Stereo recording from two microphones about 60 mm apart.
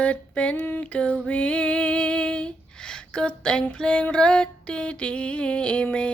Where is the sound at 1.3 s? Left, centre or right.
Left.